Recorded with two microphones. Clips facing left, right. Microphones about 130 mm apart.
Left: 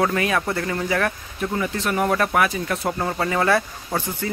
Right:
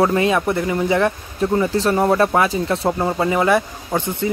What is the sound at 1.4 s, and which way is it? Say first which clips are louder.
Speech: right 7 dB; 30° right (ahead or behind).